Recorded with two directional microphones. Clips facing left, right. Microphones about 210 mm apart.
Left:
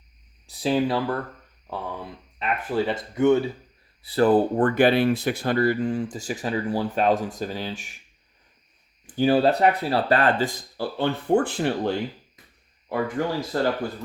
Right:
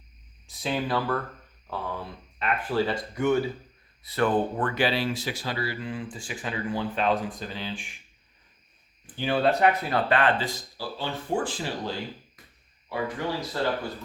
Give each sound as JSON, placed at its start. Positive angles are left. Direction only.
{"t": 0.5, "sound": "speech", "side_deg": 30}
{"t": 2.6, "sound": "speech", "side_deg": 20}
{"t": 9.1, "sound": "speech", "side_deg": 40}
{"t": 12.9, "sound": "speech", "side_deg": 45}